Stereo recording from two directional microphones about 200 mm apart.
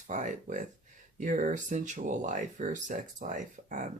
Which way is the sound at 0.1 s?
40° right (ahead or behind).